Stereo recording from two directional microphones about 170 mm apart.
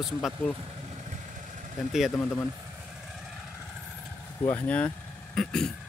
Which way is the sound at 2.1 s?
10° left (ahead or behind).